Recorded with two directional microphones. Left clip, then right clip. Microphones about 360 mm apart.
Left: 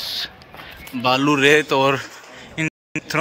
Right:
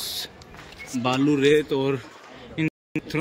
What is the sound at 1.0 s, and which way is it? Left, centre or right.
Speech, centre.